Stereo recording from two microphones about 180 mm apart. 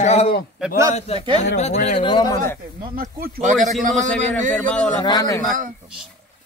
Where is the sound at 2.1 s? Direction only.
25° left (ahead or behind).